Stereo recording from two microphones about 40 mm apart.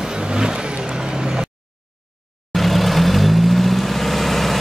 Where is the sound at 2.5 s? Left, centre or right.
Centre.